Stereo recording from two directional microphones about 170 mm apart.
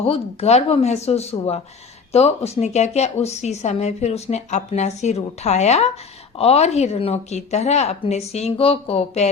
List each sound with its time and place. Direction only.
0.0 s speech: 35° left (ahead or behind)